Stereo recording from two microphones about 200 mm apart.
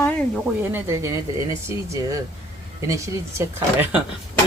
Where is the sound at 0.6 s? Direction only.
10° right (ahead or behind).